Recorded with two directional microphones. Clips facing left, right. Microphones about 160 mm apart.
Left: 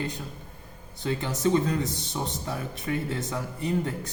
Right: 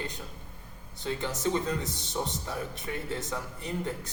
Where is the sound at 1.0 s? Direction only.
10° left (ahead or behind).